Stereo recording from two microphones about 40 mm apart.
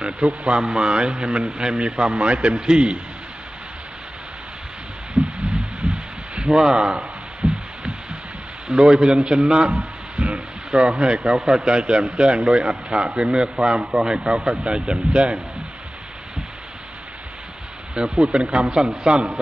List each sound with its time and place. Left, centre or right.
0.0 s a man's voice: right
5.1 s heart sounds: right
6.3 s a sound: right
8.6 s a man's voice: right
17.9 s a man's voice: right